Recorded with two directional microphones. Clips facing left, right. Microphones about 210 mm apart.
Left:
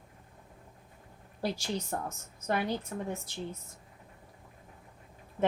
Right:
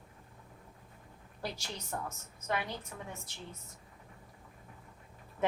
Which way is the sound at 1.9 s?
40° left (ahead or behind).